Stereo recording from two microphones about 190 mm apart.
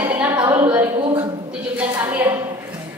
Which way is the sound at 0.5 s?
10° right (ahead or behind).